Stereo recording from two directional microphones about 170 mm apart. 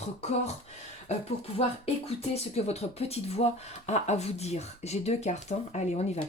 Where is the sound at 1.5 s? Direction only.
35° left (ahead or behind).